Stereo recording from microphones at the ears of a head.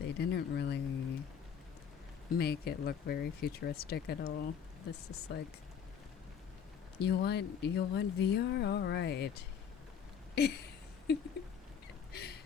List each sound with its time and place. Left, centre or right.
0.0 s speech: left
2.3 s speech: left
7.0 s speech: left
10.3 s a sound: left